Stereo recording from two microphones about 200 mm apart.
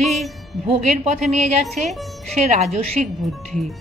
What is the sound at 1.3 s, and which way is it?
Speech, 35° right (ahead or behind).